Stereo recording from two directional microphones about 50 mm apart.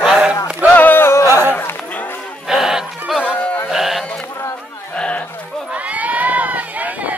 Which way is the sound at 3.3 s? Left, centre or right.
Left.